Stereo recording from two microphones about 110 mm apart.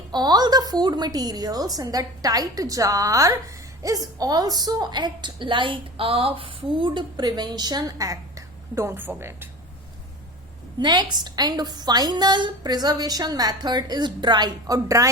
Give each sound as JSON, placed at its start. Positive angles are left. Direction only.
{"t": 0.1, "sound": "a woman's voice", "side_deg": -40}
{"t": 10.8, "sound": "a woman's voice", "side_deg": -40}